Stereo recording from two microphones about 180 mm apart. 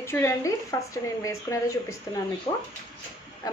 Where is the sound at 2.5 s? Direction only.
35° left (ahead or behind).